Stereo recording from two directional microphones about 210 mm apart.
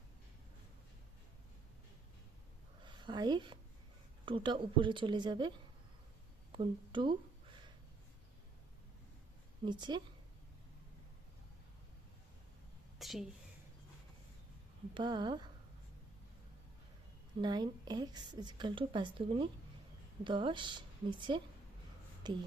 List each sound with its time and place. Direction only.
2.8 s a sound: 20° right (ahead or behind)
4.3 s a woman's voice: 25° right (ahead or behind)
9.6 s a woman's voice: 20° right (ahead or behind)
13.0 s a sound: centre (ahead or behind)
14.9 s a woman's voice: 20° right (ahead or behind)
17.4 s a woman's voice: 20° right (ahead or behind)